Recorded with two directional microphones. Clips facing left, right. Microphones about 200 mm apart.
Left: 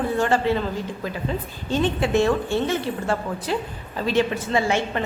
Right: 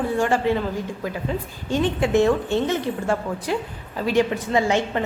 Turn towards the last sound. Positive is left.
turn(degrees=-15)  # may be behind; listen again after turning